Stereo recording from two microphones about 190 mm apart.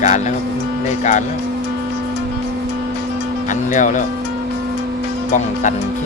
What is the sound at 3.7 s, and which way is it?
Speech, 40° left (ahead or behind).